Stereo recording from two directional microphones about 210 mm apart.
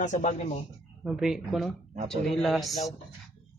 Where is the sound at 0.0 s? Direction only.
35° left (ahead or behind).